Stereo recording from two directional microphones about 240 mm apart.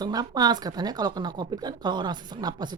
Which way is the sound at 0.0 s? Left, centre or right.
Centre.